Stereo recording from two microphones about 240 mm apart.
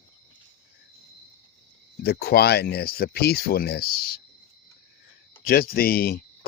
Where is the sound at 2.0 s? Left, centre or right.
Left.